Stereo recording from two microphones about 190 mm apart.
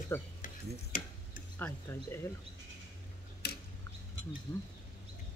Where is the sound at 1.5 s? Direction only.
10° left (ahead or behind).